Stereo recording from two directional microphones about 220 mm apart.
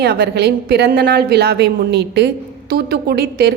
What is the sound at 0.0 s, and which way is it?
A woman's voice, 45° right (ahead or behind).